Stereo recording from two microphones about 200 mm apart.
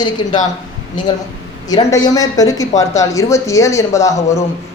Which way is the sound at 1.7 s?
20° left (ahead or behind).